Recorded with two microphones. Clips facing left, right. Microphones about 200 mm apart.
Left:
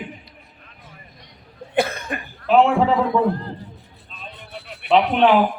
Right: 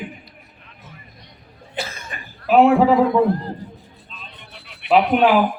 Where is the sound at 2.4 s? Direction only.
5° right (ahead or behind).